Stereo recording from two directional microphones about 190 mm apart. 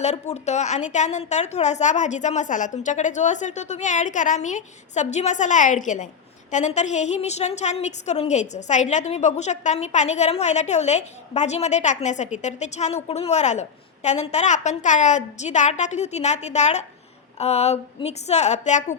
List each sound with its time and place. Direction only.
0.0 s a woman's voice: 35° left (ahead or behind)